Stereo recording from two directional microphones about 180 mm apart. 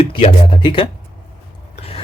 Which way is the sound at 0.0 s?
30° left (ahead or behind).